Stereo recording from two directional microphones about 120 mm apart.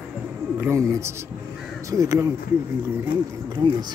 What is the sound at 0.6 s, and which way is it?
Speech, 25° right (ahead or behind).